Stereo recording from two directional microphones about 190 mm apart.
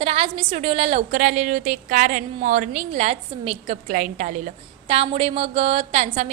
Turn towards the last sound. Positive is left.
turn(degrees=-35)  # may be behind; listen again after turning